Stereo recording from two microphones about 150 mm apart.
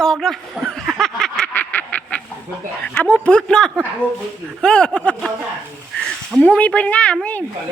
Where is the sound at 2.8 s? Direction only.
10° left (ahead or behind).